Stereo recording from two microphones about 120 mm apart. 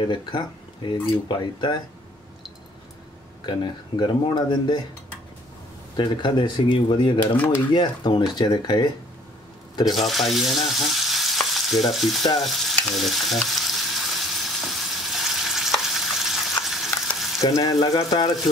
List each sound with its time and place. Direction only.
0.0 s speech: 40° left (ahead or behind)
3.4 s speech: 40° left (ahead or behind)
5.9 s speech: 40° left (ahead or behind)
7.3 s speech: 20° left (ahead or behind)
7.7 s speech: 40° left (ahead or behind)
9.8 s frying: centre (ahead or behind)
17.4 s speech: 30° left (ahead or behind)